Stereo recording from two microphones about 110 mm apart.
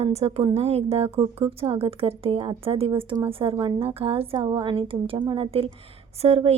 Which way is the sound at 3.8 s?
60° right (ahead or behind).